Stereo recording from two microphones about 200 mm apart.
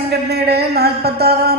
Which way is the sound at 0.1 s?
55° right (ahead or behind).